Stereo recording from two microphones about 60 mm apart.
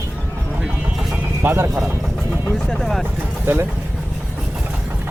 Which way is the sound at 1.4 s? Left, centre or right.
Right.